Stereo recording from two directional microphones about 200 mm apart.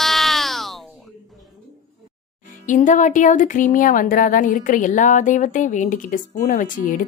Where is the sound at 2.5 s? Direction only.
40° left (ahead or behind).